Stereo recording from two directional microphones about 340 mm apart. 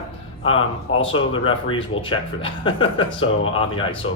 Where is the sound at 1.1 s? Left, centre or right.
Centre.